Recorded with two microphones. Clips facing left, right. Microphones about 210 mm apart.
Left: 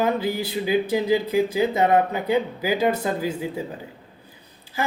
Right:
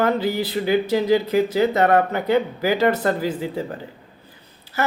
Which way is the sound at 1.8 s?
80° right.